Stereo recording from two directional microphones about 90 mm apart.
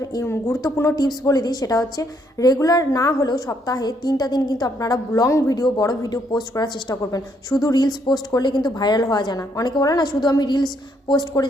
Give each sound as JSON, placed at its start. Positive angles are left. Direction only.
{"t": 0.0, "sound": "a woman's voice", "side_deg": 35}